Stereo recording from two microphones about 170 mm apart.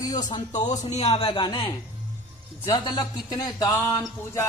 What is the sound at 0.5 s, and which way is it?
A man's voice, 45° left (ahead or behind).